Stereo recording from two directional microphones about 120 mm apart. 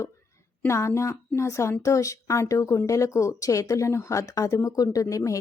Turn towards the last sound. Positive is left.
turn(degrees=25)  # may be behind; listen again after turning